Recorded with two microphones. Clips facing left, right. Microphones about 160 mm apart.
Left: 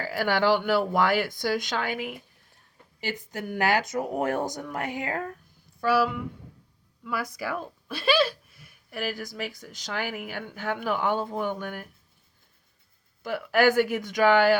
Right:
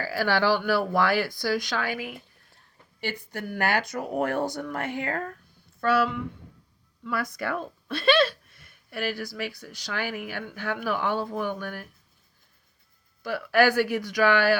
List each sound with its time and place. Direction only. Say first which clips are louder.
0.0 s speech: even; 20° left (ahead or behind)
3.2 s speech: left 3 dB; 20° left (ahead or behind)
8.9 s speech: right 1 dB; 20° left (ahead or behind)
13.2 s speech: even; 20° left (ahead or behind)